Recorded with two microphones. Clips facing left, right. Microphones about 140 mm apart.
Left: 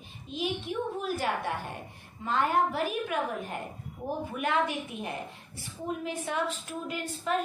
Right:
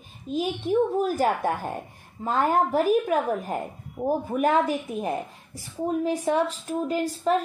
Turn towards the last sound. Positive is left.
turn(degrees=-35)  # may be behind; listen again after turning